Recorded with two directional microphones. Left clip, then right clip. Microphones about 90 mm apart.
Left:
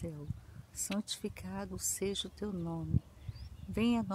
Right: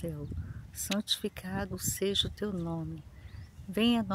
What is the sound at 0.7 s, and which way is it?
Speech, 35° right (ahead or behind).